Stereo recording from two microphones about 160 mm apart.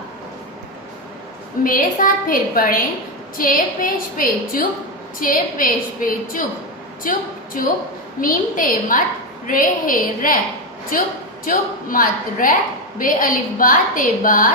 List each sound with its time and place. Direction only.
1.6 s a woman's voice: 60° left (ahead or behind)
11.4 s a woman's voice: 60° left (ahead or behind)